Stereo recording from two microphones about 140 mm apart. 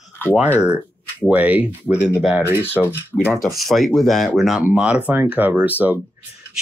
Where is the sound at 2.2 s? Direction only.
15° right (ahead or behind).